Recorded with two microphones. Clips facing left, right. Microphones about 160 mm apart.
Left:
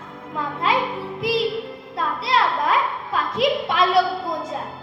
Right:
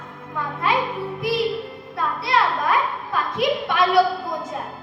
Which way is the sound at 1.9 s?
25° left (ahead or behind).